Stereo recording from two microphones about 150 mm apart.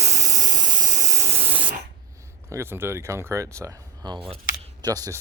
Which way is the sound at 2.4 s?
15° right (ahead or behind).